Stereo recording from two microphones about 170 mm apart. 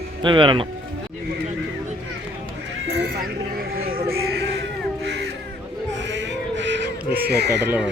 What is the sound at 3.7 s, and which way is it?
Music, 60° right (ahead or behind).